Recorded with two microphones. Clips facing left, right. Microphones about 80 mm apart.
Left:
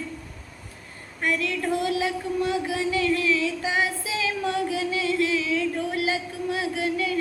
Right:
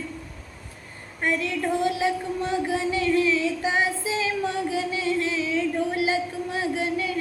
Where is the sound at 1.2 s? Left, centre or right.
Right.